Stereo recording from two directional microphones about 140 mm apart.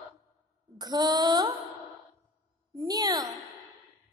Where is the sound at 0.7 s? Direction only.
30° right (ahead or behind).